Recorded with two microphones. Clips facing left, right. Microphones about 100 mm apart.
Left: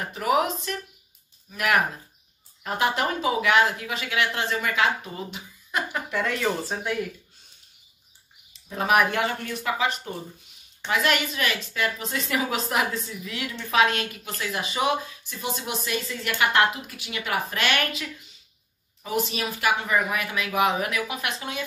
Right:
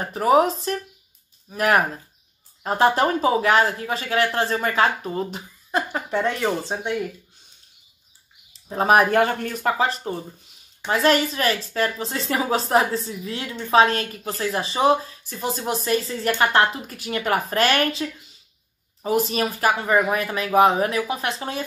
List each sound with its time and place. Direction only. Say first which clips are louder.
0.0 s speech: right 6 dB; 35° right (ahead or behind)
8.5 s speech: right 4 dB; 35° right (ahead or behind)
19.0 s speech: right 6 dB; 40° right (ahead or behind)